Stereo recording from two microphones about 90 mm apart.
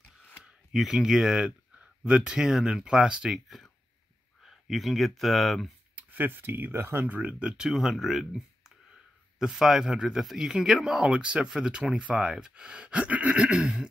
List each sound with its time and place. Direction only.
0.4 s speech: 5° right (ahead or behind)
5.9 s speech: 20° right (ahead or behind)